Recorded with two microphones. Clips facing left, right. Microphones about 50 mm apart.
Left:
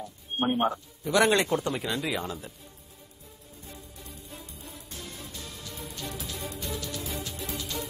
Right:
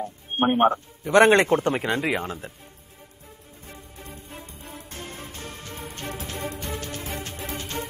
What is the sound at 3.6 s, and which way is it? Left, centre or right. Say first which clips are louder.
Music: right 4 dB; right.